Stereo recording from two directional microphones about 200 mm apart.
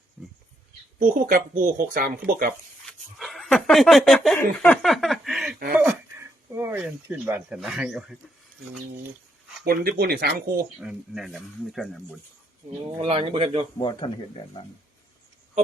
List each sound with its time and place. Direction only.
0.2 s a sound: 5° right (ahead or behind)
0.9 s speech: 45° right (ahead or behind)
3.2 s speech: centre (ahead or behind)
9.6 s speech: 50° right (ahead or behind)
10.8 s speech: 5° right (ahead or behind)
13.0 s speech: 30° right (ahead or behind)
13.7 s speech: 20° left (ahead or behind)